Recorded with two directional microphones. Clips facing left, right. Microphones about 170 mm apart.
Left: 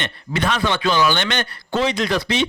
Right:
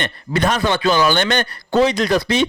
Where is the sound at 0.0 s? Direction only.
45° right (ahead or behind).